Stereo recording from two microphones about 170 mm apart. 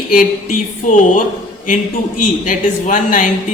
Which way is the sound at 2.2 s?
50° left (ahead or behind).